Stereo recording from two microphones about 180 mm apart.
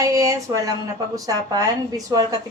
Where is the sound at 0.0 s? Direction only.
20° right (ahead or behind).